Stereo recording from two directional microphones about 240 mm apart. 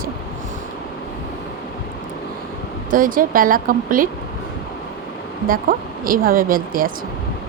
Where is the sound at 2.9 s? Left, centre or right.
Right.